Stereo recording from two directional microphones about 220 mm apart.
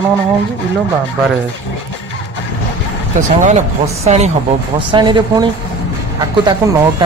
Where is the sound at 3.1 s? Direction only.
30° right (ahead or behind).